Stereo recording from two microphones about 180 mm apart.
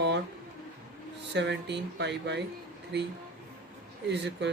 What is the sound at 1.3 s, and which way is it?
Speech, 75° right (ahead or behind).